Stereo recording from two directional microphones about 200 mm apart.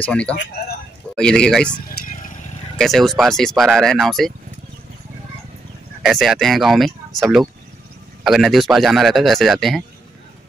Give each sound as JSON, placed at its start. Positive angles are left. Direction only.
{"t": 0.0, "sound": "a man's voice", "side_deg": 5}
{"t": 2.8, "sound": "a man's voice", "side_deg": 0}
{"t": 6.0, "sound": "a man's voice", "side_deg": 0}